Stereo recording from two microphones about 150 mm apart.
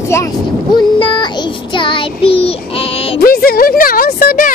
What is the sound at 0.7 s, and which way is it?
Child singing, 30° left (ahead or behind).